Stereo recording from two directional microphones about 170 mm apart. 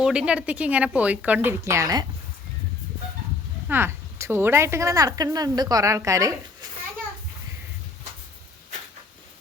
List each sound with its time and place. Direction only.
0.0 s speech: 5° right (ahead or behind)
3.7 s a woman's voice: 15° right (ahead or behind)